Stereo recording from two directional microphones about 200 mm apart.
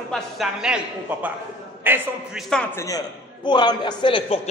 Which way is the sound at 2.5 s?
10° left (ahead or behind).